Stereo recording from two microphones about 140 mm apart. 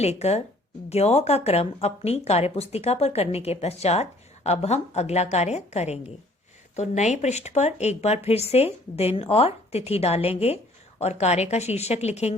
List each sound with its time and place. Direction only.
0.0 s speech: 50° left (ahead or behind)